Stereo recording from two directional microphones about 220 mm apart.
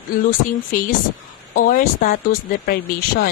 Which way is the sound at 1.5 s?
40° left (ahead or behind).